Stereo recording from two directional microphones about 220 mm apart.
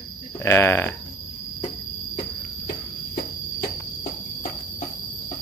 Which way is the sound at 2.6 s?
45° left (ahead or behind).